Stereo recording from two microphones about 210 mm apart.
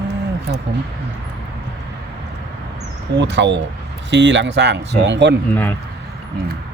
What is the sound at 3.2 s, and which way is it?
Speech, 55° right (ahead or behind).